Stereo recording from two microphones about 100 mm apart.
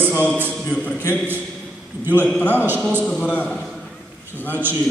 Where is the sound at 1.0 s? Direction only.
20° right (ahead or behind).